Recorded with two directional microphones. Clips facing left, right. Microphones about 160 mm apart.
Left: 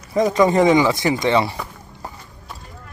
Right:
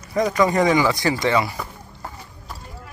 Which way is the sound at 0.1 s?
20° left (ahead or behind).